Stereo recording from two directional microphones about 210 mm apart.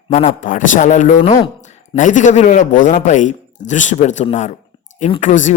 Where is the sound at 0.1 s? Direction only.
30° left (ahead or behind).